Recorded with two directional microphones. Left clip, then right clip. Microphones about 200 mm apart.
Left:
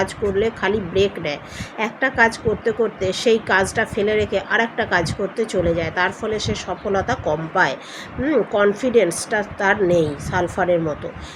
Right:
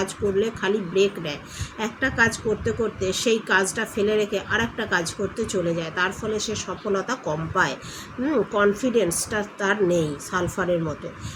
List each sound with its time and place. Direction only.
0.0 s a woman's voice: 10° right (ahead or behind)